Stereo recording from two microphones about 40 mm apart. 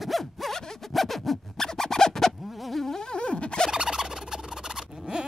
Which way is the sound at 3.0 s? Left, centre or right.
Left.